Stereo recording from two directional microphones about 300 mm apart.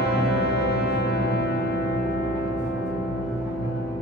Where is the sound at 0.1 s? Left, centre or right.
Left.